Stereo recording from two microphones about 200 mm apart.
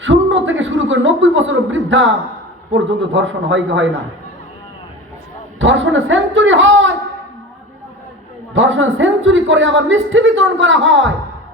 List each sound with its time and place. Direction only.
0.0 s a woman's voice: 70° right (ahead or behind)
5.5 s a woman's voice: 70° right (ahead or behind)
8.5 s a woman's voice: 70° right (ahead or behind)